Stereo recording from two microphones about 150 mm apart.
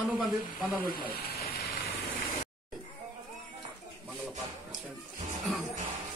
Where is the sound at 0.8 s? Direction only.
90° left.